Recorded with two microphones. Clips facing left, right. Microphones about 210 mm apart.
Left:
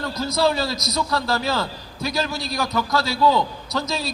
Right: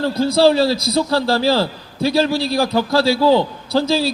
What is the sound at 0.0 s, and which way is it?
A man's voice, 30° right (ahead or behind).